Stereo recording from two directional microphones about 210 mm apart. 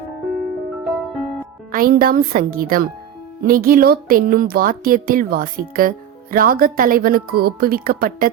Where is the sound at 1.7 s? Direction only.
45° right (ahead or behind).